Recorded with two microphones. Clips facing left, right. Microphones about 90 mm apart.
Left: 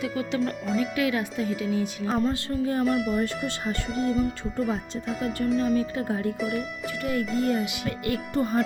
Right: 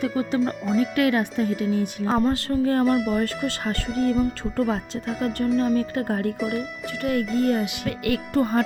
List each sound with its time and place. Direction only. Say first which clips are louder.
0.2 s speech: right 3 dB; 35° right (ahead or behind)
0.9 s speech: right 5 dB; 55° right (ahead or behind)
2.8 s speech: right 3 dB; centre (ahead or behind)
5.7 s speech: right 2 dB; 50° right (ahead or behind)
7.2 s speech: right 3 dB; centre (ahead or behind)
7.5 s speech: right 2 dB; 55° right (ahead or behind); by 8.6 s 90° right